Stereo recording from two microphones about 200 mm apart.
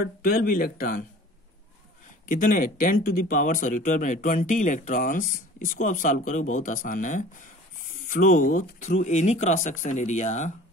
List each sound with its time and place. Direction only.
0.0 s speech: 45° left (ahead or behind)
2.2 s speech: 40° left (ahead or behind)